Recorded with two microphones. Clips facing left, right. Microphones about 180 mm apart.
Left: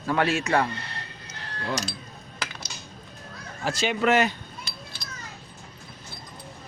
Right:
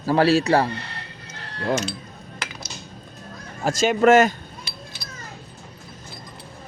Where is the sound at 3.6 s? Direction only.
45° right (ahead or behind).